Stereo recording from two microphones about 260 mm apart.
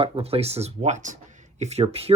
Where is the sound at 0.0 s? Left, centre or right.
Right.